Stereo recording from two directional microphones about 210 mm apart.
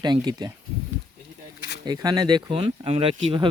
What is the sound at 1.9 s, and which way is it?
Speech, 20° right (ahead or behind).